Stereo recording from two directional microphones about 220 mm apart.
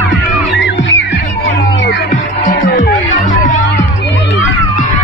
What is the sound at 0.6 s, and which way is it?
Music, 55° left (ahead or behind).